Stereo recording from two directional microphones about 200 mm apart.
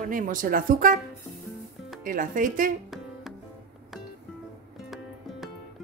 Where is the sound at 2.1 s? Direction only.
40° right (ahead or behind).